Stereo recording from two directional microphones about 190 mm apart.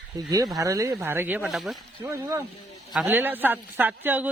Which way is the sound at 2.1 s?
15° right (ahead or behind).